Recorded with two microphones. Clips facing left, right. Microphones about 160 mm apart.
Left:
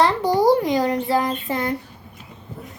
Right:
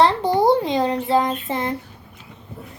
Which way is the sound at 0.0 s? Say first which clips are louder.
Right 1 dB; 25° right (ahead or behind).